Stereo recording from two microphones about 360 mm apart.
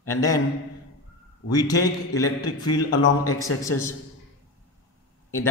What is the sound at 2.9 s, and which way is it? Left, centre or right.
Speech, left.